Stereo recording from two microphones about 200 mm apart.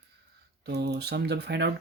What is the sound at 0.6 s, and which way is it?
Speech, 55° right (ahead or behind).